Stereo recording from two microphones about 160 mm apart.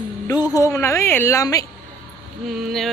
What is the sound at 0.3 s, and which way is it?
A woman's voice, 25° left (ahead or behind).